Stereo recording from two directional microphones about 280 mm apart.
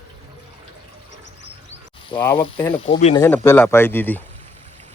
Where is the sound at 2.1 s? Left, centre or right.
Centre.